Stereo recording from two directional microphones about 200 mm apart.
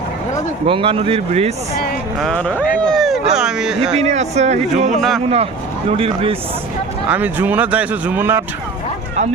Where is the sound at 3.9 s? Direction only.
35° right (ahead or behind).